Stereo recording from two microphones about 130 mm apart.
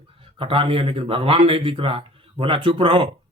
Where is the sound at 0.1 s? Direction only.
45° right (ahead or behind).